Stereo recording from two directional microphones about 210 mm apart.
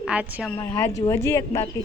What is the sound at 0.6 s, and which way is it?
Speech, 10° left (ahead or behind).